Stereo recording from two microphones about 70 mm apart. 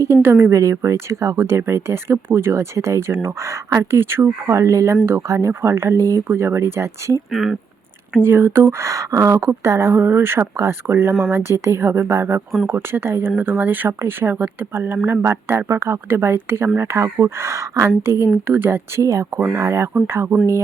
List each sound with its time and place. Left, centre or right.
0.0 s speech: right
3.9 s speech: right
4.4 s speech: right
6.2 s speech: right
7.3 s speech: centre
8.2 s speech: right
8.9 s speech: right
14.3 s speech: centre
14.7 s speech: right
18.4 s speech: right
19.0 s speech: right